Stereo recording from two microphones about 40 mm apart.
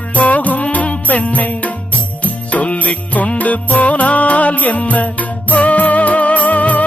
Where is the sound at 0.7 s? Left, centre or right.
Left.